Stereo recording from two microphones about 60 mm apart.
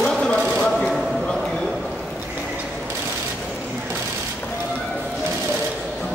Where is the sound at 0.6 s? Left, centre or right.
Centre.